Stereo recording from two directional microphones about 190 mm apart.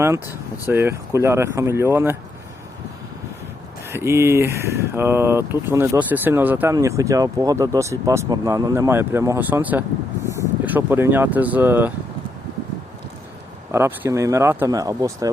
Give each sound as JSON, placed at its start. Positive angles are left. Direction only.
{"t": 0.3, "sound": "speech", "side_deg": 15}
{"t": 0.7, "sound": "speech", "side_deg": -10}
{"t": 3.8, "sound": "speech", "side_deg": -15}
{"t": 13.7, "sound": "speech", "side_deg": -10}